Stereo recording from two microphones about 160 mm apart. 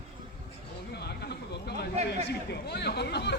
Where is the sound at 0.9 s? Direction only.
90° left.